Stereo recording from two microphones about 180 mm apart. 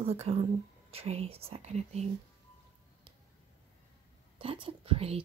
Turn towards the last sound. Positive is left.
turn(degrees=-30)  # may be behind; listen again after turning